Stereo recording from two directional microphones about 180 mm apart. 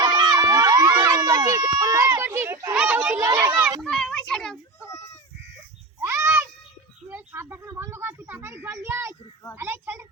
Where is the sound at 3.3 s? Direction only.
15° right (ahead or behind).